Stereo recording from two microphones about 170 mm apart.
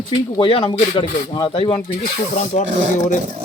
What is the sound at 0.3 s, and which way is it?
Speech, 30° left (ahead or behind).